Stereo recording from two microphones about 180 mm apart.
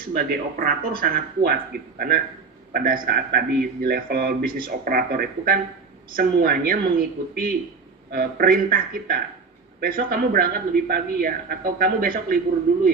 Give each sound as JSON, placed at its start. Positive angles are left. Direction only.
{"t": 0.0, "sound": "speech", "side_deg": -55}